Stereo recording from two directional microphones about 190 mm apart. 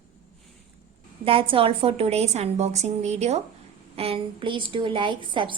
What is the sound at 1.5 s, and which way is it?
A woman's voice, 30° right (ahead or behind).